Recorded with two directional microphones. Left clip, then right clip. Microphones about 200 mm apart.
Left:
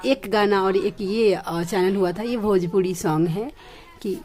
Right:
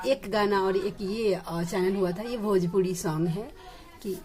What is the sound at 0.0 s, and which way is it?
A woman's voice, 35° left (ahead or behind).